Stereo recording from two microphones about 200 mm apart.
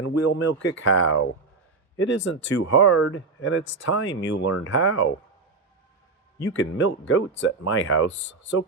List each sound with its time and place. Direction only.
0.0 s speech: 85° left
6.4 s speech: 70° left (ahead or behind)